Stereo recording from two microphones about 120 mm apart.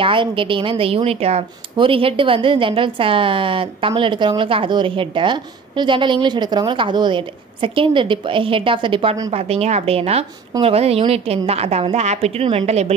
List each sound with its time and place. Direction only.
0.0 s a woman's voice: 45° right (ahead or behind)
9.3 s a woman's voice: 60° right (ahead or behind)